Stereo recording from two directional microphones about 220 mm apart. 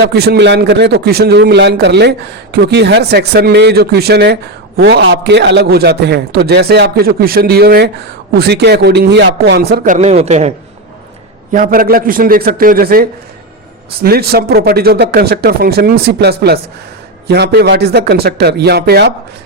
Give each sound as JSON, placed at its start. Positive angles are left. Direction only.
{"t": 0.0, "sound": "a man's voice", "side_deg": -50}
{"t": 11.5, "sound": "a man's voice", "side_deg": -40}